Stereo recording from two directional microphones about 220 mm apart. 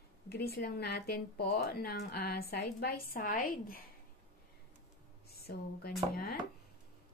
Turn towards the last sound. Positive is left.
turn(degrees=45)  # may be behind; listen again after turning